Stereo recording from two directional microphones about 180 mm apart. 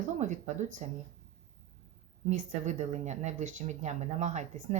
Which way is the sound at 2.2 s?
40° right (ahead or behind).